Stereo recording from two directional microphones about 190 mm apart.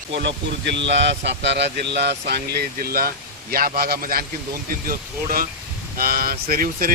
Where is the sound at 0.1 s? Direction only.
65° right (ahead or behind).